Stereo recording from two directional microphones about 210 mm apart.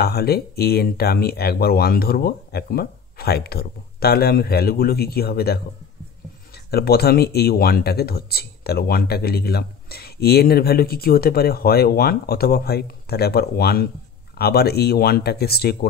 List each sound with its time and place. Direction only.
0.0 s speech: 50° left (ahead or behind)